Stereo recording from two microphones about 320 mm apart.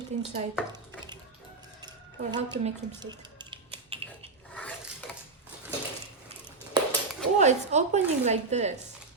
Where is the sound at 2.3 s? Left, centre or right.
Centre.